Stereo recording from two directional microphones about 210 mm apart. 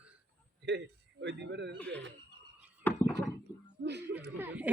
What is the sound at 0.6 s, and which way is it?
A man's voice, 55° right (ahead or behind).